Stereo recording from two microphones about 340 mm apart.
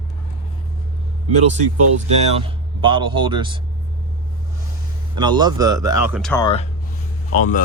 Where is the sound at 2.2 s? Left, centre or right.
Centre.